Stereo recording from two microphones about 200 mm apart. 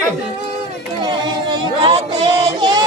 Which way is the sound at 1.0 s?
20° right (ahead or behind).